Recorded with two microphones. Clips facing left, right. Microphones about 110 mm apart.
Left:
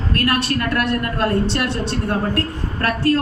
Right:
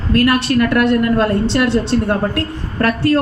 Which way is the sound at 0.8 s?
20° right (ahead or behind).